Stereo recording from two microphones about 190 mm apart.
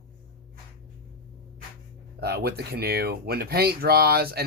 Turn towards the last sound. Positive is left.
turn(degrees=-55)  # may be behind; listen again after turning